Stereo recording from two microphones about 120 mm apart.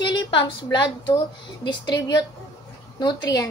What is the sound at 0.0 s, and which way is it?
A woman's voice, 40° left (ahead or behind).